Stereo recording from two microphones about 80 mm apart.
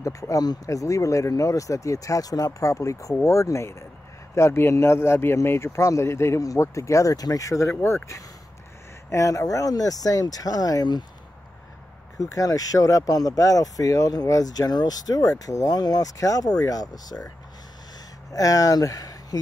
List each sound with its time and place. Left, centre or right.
0.0 s speech: left
12.2 s speech: left
18.3 s speech: left